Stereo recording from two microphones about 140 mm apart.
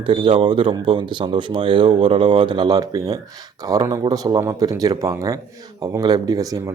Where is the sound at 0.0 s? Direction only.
35° right (ahead or behind).